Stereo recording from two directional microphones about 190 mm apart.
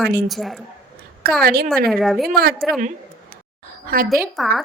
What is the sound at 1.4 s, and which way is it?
Speech, 55° right (ahead or behind).